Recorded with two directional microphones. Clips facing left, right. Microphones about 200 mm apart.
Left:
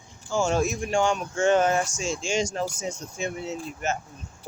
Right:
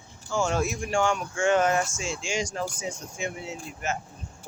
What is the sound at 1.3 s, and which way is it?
Speech, 30° left (ahead or behind).